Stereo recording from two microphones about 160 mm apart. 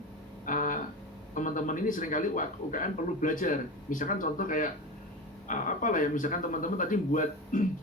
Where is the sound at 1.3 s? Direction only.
55° left (ahead or behind).